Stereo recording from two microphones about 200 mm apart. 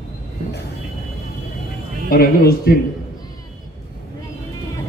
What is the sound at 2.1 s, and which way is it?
Speech, 50° left (ahead or behind).